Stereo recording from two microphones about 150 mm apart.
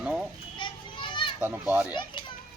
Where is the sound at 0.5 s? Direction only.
30° left (ahead or behind).